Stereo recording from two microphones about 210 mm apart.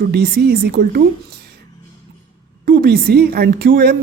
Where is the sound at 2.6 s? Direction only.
45° right (ahead or behind).